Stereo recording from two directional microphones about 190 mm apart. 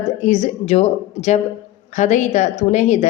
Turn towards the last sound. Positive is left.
turn(degrees=35)  # may be behind; listen again after turning